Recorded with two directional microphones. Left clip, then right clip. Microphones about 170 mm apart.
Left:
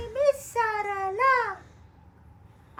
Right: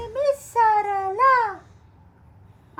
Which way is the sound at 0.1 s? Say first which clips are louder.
Right 1 dB; 75° right (ahead or behind).